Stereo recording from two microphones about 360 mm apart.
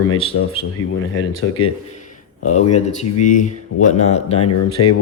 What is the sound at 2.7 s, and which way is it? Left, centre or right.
Speech, centre.